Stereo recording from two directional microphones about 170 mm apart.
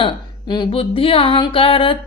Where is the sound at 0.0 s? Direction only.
25° left (ahead or behind).